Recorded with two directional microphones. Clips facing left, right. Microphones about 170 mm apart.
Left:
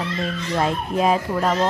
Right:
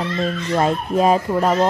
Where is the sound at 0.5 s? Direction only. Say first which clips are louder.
Right 3 dB; 40° right (ahead or behind).